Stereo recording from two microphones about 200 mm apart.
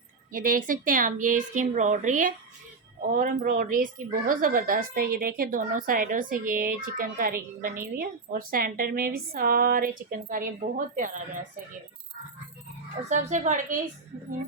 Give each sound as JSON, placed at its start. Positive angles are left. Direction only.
{"t": 0.3, "sound": "a woman's voice", "side_deg": -45}
{"t": 13.1, "sound": "speech", "side_deg": -35}